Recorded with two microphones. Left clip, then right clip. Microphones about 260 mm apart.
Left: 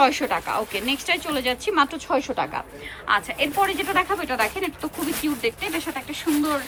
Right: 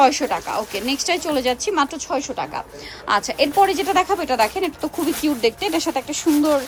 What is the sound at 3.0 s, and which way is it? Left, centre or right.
Speech, right.